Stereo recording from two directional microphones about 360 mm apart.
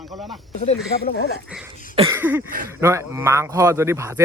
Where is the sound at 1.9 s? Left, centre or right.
Centre.